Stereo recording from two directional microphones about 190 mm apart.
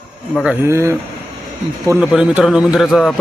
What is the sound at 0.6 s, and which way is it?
A man's voice, 15° right (ahead or behind).